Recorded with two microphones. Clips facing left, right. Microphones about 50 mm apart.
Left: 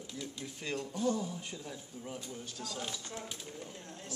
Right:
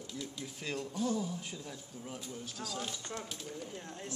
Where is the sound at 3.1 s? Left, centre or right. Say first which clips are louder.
Right 1 dB; centre.